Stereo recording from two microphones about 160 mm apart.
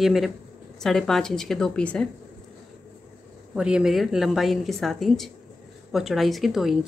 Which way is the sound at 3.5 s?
5° right (ahead or behind).